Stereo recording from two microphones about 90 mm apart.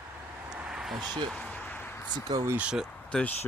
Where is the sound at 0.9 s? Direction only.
50° right (ahead or behind).